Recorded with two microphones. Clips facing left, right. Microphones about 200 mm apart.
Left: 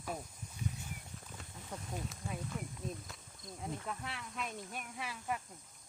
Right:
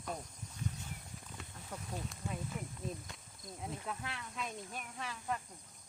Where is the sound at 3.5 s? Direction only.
Centre (ahead or behind).